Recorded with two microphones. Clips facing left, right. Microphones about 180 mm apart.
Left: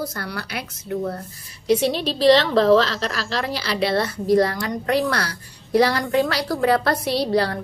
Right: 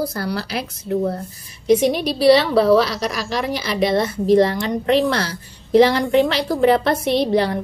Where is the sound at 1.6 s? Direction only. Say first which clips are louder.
Right 4 dB; 15° right (ahead or behind).